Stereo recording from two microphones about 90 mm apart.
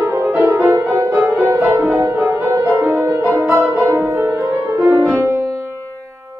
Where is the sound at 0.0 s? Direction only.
30° right (ahead or behind).